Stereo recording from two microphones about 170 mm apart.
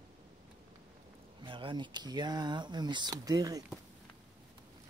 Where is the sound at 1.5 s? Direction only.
30° right (ahead or behind).